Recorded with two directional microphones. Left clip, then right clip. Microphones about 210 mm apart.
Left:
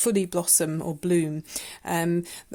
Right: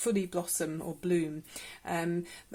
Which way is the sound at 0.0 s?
50° left (ahead or behind).